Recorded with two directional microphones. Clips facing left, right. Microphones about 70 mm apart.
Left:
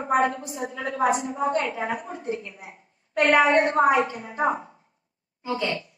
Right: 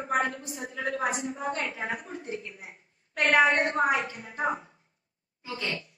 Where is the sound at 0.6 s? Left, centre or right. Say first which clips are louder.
Left 6 dB; centre.